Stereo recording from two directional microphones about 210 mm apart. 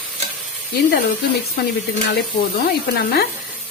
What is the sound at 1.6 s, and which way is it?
Speech, 50° left (ahead or behind).